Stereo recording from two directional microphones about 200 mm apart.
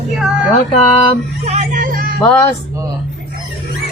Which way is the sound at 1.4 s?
35° right (ahead or behind).